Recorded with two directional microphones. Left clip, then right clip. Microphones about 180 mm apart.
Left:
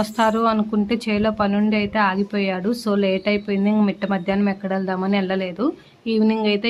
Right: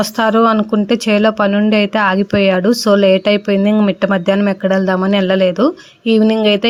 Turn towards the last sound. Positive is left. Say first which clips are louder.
# right 8 dB
turn(degrees=-35)  # may be behind; listen again after turning